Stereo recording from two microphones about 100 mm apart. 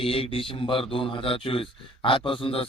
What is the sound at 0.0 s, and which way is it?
A man's voice, 70° left (ahead or behind).